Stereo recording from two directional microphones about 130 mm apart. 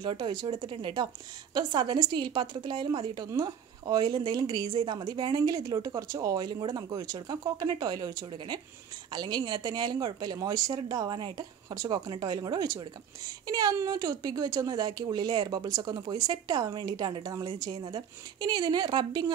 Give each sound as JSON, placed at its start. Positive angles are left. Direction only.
{"t": 0.0, "sound": "a woman's voice", "side_deg": -35}
{"t": 8.3, "sound": "a woman's voice", "side_deg": -40}